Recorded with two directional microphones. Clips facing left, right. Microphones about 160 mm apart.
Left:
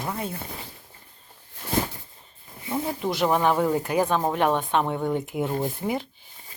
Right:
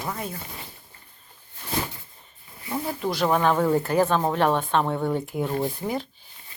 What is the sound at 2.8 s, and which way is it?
Speech, 20° left (ahead or behind).